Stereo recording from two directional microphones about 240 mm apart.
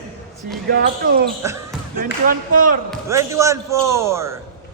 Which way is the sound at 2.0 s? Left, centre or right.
Right.